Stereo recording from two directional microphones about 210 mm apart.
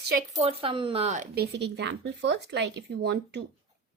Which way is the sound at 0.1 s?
35° right (ahead or behind).